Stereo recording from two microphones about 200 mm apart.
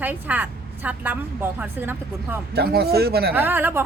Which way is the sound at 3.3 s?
10° right (ahead or behind).